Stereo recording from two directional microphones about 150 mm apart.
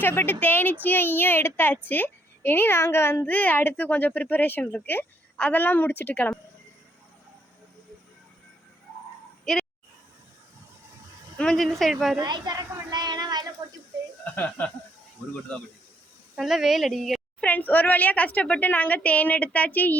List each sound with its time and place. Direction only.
0.0 s speech: 15° left (ahead or behind)
9.4 s a sound: centre (ahead or behind)
11.3 s speech: 5° left (ahead or behind)
12.1 s a woman's voice: 25° right (ahead or behind)
14.3 s speech: 10° left (ahead or behind)
16.3 s a woman's voice: centre (ahead or behind)